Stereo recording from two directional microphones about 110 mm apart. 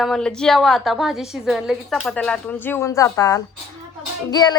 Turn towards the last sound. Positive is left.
turn(degrees=40)  # may be behind; listen again after turning